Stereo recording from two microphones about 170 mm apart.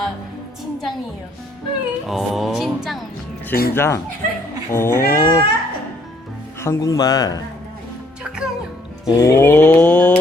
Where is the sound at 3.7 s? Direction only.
15° left (ahead or behind).